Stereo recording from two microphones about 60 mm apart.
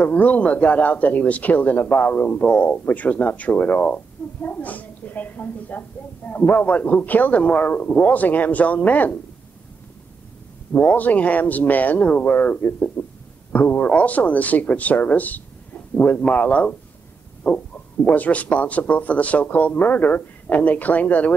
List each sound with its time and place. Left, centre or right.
0.0 s a woman's voice: left
10.7 s a woman's voice: left
17.4 s a sound: centre
18.0 s a woman's voice: left